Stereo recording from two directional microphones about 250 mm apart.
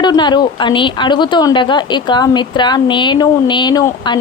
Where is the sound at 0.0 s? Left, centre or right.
Centre.